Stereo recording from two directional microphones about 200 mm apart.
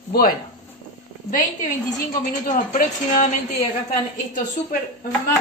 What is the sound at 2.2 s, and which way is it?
A man's voice, 40° left (ahead or behind).